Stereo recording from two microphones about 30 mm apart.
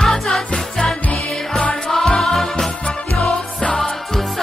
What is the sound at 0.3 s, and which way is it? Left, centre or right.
Music, left.